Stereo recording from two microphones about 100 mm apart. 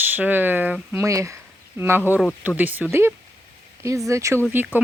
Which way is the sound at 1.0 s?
30° right (ahead or behind).